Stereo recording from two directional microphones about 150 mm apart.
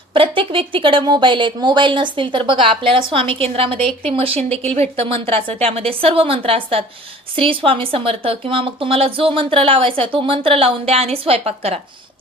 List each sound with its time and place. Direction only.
0.1 s speech: 35° right (ahead or behind)